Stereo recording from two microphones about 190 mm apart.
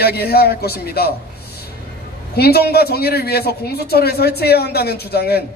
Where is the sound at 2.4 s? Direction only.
55° left (ahead or behind).